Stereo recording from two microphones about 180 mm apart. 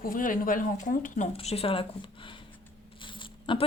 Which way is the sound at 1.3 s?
30° left (ahead or behind).